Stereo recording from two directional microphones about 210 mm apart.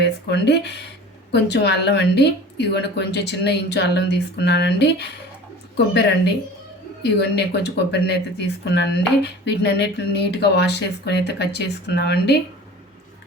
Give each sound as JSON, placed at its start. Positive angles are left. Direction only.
{"t": 0.0, "sound": "a woman's voice", "side_deg": 55}